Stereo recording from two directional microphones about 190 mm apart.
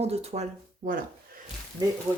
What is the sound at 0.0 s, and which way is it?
Speech, 35° right (ahead or behind).